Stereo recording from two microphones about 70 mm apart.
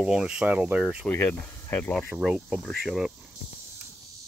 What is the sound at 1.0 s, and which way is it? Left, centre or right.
Speech, left.